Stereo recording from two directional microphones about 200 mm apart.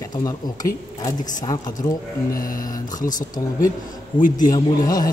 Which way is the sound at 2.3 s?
45° left (ahead or behind).